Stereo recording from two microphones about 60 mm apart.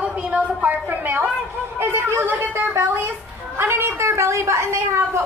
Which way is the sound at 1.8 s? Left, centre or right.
Right.